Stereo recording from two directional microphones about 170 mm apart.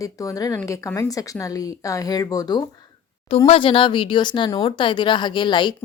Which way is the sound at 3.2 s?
35° left (ahead or behind).